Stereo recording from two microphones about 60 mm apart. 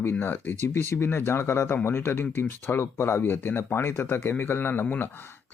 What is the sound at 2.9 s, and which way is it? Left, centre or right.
Speech, left.